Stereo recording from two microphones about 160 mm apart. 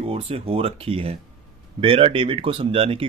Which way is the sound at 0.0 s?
35° right (ahead or behind).